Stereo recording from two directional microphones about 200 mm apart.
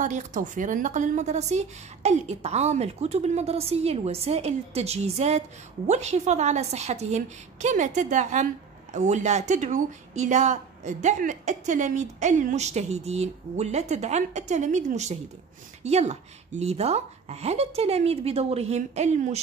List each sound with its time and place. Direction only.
0.0 s speech: 40° right (ahead or behind)